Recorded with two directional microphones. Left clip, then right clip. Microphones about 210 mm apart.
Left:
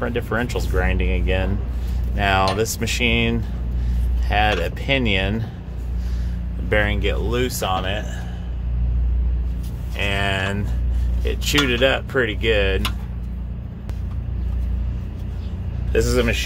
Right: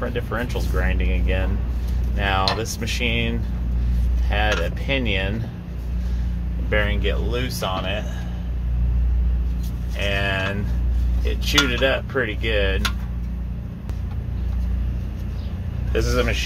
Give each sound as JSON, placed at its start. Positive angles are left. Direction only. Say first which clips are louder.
{"t": 0.0, "sound": "speech", "louder": "left 3 dB", "side_deg": 40}
{"t": 6.7, "sound": "speech", "louder": "left 2 dB", "side_deg": 50}
{"t": 9.9, "sound": "speech", "louder": "left 1 dB", "side_deg": 50}
{"t": 15.9, "sound": "speech", "louder": "left 3 dB", "side_deg": 45}